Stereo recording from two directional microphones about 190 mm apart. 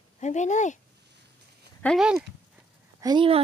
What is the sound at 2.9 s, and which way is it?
Speech, 20° right (ahead or behind).